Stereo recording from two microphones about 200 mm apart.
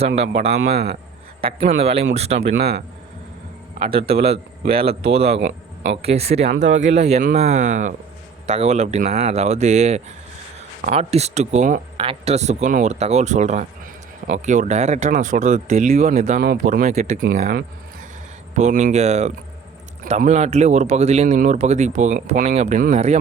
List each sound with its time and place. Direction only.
0.5 s a man's voice: 55° right (ahead or behind)
1.4 s a man's voice: 25° right (ahead or behind)
2.6 s speech: 55° right (ahead or behind)
3.8 s speech: 30° right (ahead or behind)
5.4 s a man's voice: 60° right (ahead or behind)
6.0 s speech: 30° right (ahead or behind)